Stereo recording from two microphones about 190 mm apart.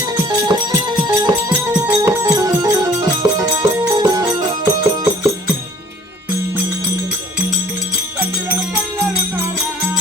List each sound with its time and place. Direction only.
0.2 s music: 20° right (ahead or behind)
1.5 s music: 10° right (ahead or behind)
8.2 s music: 10° right (ahead or behind)